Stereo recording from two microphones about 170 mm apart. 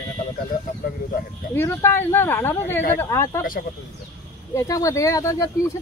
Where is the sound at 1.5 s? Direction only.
15° left (ahead or behind).